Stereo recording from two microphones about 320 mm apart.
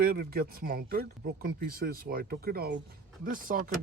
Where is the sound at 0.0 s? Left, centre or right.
Right.